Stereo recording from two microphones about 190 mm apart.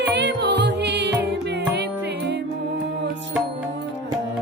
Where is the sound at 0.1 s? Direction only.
65° right (ahead or behind).